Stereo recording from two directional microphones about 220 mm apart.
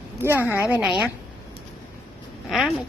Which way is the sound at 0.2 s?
10° right (ahead or behind).